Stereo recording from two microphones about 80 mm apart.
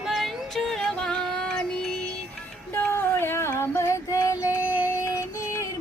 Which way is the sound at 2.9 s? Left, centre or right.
Left.